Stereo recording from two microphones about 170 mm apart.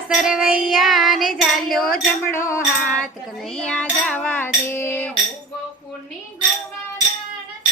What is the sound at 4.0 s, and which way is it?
Speech, 5° left (ahead or behind).